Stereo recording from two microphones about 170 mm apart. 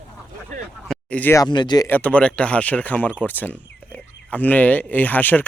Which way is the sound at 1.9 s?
10° left (ahead or behind).